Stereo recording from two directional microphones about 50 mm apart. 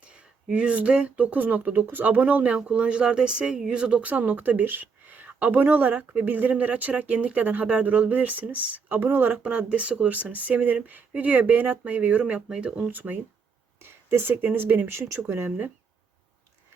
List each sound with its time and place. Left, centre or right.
0.0 s speech: right
9.4 s speech: right
12.9 s speech: right
13.8 s speech: right